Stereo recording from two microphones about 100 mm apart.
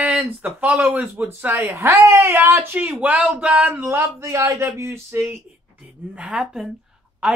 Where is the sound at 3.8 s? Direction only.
25° right (ahead or behind).